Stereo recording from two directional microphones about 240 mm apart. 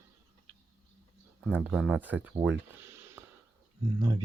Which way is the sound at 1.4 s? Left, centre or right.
Centre.